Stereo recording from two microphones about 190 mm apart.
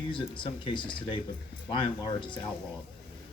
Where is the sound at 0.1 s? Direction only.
25° left (ahead or behind).